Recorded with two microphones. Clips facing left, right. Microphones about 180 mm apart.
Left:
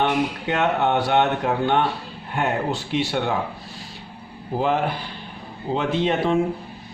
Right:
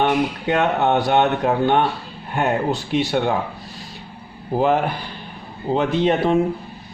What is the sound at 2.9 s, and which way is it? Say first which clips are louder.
Speech: right 3 dB; 40° right (ahead or behind).